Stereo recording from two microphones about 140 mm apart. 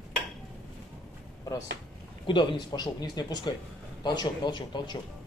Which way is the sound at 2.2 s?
35° left (ahead or behind).